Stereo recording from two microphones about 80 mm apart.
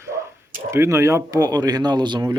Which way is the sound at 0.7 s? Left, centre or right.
Right.